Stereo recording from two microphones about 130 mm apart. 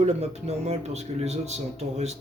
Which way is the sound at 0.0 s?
60° right (ahead or behind).